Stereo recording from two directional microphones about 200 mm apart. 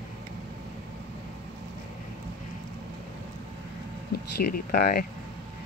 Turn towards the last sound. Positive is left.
turn(degrees=50)  # may be behind; listen again after turning